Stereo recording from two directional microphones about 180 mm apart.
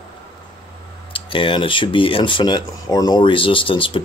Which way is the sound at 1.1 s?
30° left (ahead or behind).